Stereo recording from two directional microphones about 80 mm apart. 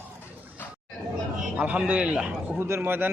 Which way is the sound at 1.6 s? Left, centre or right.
Centre.